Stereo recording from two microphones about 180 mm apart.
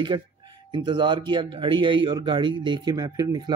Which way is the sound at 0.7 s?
25° right (ahead or behind).